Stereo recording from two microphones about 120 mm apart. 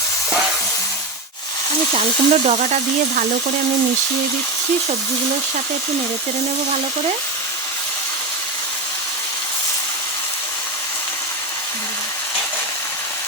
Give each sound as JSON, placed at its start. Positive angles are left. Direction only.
{"t": 1.9, "sound": "speech", "side_deg": -65}